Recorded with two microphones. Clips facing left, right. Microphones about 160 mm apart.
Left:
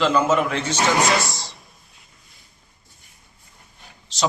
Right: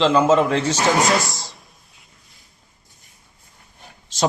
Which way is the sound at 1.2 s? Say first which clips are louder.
Even; centre (ahead or behind).